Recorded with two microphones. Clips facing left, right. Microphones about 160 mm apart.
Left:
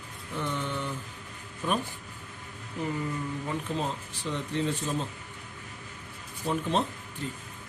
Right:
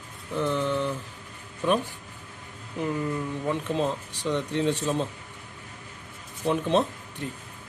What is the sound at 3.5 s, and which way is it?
Speech, 75° right (ahead or behind).